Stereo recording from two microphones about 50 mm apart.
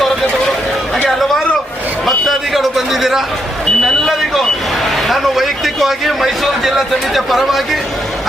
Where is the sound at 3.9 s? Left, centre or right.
Centre.